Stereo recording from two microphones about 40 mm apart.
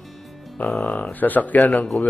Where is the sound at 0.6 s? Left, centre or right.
Left.